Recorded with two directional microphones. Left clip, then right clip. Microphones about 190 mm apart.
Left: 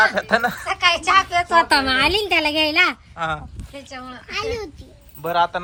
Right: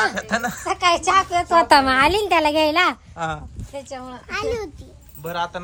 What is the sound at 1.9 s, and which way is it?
A woman's voice, 20° right (ahead or behind).